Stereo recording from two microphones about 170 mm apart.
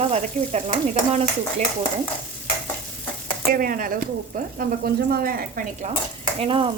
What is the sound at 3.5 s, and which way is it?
Speech, 55° right (ahead or behind).